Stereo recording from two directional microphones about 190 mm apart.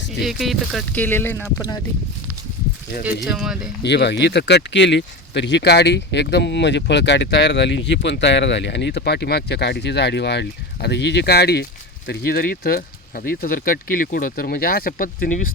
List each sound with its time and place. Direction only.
0.2 s speech: centre (ahead or behind); by 1.8 s 20° left (ahead or behind)
3.0 s speech: 5° right (ahead or behind)
3.8 s speech: 65° left (ahead or behind); by 15.5 s 45° left (ahead or behind)